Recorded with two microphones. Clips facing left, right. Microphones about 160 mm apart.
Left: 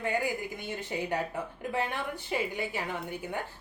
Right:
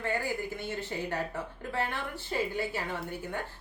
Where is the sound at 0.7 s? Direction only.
15° left (ahead or behind).